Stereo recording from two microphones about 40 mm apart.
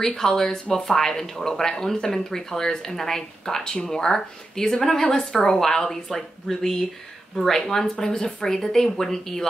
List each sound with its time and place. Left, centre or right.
0.0 s speech: centre
5.0 s a woman's voice: left
5.4 s speech: centre